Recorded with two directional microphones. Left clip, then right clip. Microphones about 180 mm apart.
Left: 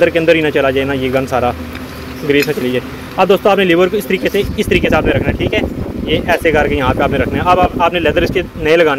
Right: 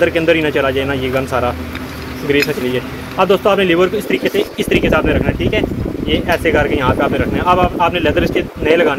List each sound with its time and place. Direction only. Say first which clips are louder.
0.0 s speech: left 2 dB; 30° left (ahead or behind)